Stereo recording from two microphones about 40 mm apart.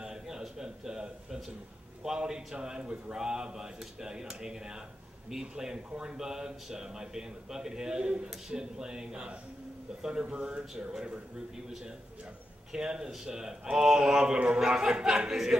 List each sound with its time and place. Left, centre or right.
0.0 s a sound: centre
2.0 s a man's voice: centre
12.7 s a man's voice: centre